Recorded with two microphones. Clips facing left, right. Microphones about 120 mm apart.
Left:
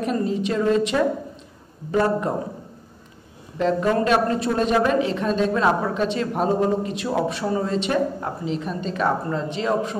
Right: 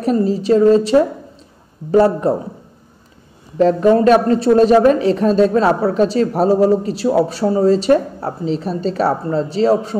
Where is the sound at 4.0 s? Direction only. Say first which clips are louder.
Right 8 dB; 40° right (ahead or behind).